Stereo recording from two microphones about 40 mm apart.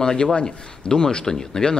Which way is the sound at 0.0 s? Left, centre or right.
Left.